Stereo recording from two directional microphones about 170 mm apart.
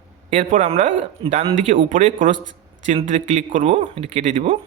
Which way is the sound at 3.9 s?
35° right (ahead or behind).